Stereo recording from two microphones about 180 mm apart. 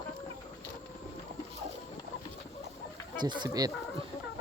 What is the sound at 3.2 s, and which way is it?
Speech, 25° right (ahead or behind).